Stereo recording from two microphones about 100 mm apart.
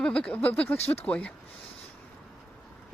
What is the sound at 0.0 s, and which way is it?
Speech, 10° left (ahead or behind).